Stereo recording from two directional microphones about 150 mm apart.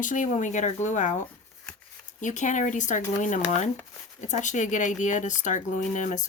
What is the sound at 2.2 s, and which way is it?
Speech, 55° left (ahead or behind).